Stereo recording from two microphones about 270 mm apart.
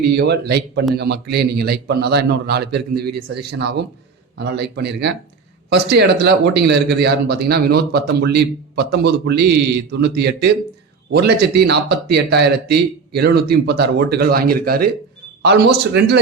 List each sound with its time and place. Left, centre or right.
0.0 s speech: right